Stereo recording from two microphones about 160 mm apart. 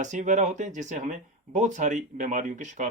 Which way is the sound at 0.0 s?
50° right (ahead or behind).